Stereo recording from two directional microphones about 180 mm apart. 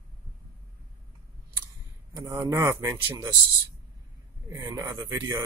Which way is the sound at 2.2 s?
15° right (ahead or behind).